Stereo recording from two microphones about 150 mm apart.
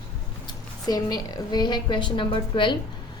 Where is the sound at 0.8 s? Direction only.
25° left (ahead or behind).